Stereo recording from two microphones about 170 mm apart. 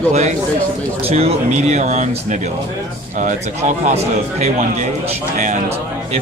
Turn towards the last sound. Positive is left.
turn(degrees=-40)  # may be behind; listen again after turning